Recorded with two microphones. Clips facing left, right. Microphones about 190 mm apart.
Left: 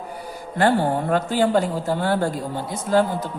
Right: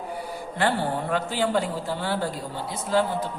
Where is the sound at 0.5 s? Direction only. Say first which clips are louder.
Left 6 dB; 45° left (ahead or behind).